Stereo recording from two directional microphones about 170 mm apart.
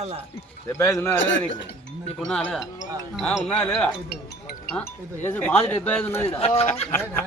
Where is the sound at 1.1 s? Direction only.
90° left.